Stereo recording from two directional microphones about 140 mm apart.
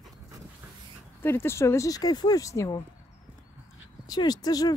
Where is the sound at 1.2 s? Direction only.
15° left (ahead or behind).